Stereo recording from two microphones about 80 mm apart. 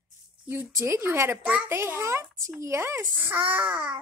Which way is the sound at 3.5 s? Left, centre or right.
Centre.